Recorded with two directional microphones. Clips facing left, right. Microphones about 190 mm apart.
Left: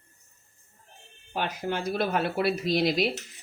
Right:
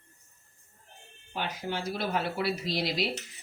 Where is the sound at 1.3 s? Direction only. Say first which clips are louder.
Left 4 dB; 50° left (ahead or behind).